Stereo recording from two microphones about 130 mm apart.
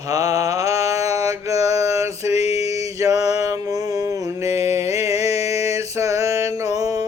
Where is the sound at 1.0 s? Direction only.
55° left (ahead or behind).